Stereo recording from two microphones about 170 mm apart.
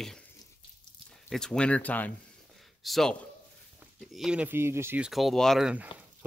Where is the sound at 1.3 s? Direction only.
5° left (ahead or behind).